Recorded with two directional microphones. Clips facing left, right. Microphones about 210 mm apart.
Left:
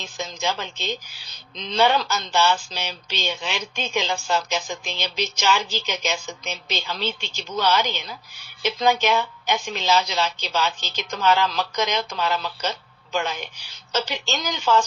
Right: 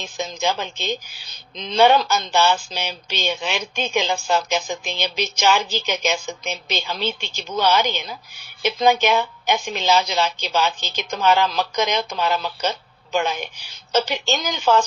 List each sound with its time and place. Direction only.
0.0 s a woman's voice: 55° right (ahead or behind)